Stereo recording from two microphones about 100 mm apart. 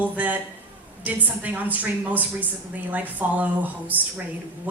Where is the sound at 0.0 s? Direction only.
15° right (ahead or behind).